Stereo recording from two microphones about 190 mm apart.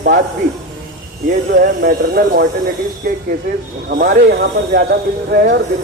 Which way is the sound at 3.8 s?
55° right (ahead or behind).